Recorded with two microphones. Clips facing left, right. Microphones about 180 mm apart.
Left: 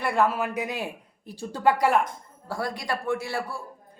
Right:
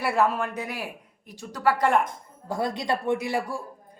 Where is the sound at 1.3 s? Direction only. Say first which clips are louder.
Left 2 dB; 30° left (ahead or behind).